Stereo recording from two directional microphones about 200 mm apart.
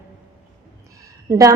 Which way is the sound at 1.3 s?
15° right (ahead or behind).